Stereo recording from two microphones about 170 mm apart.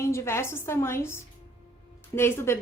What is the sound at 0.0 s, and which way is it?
A woman's voice, 15° left (ahead or behind).